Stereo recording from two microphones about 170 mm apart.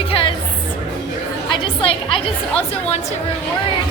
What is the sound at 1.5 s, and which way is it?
Chatter, 30° left (ahead or behind).